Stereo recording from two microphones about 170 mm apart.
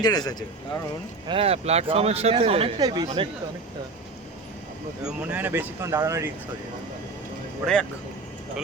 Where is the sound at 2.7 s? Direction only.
20° right (ahead or behind).